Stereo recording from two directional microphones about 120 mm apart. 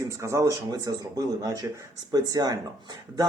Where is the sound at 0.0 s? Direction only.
25° right (ahead or behind).